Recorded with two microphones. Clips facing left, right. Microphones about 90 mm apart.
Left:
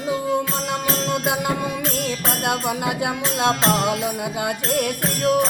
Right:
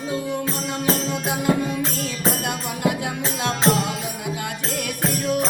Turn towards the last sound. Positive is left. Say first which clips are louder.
# left 2 dB
turn(degrees=55)  # may be behind; listen again after turning